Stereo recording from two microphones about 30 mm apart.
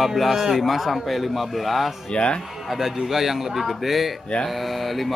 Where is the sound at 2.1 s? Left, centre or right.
Left.